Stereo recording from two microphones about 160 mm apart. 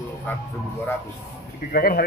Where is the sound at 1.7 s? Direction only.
65° left (ahead or behind).